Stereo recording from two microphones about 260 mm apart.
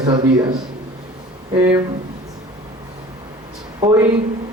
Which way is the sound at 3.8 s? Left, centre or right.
Centre.